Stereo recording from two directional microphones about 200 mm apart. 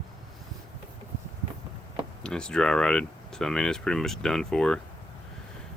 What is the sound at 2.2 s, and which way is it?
Speech, 5° left (ahead or behind).